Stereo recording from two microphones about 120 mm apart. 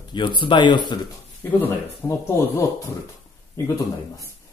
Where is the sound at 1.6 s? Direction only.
25° left (ahead or behind).